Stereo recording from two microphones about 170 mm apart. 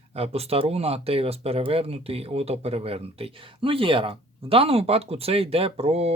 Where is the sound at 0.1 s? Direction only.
35° right (ahead or behind).